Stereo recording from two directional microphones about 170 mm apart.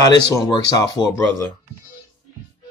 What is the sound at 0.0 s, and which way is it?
Speech, 20° left (ahead or behind).